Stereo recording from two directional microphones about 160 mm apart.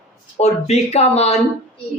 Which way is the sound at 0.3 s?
40° left (ahead or behind).